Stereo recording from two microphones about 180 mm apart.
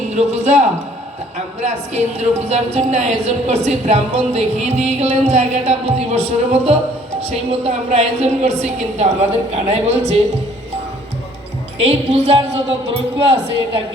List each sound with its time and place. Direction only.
0.1 s a woman's voice: 40° right (ahead or behind)
11.8 s a woman's voice: 35° right (ahead or behind)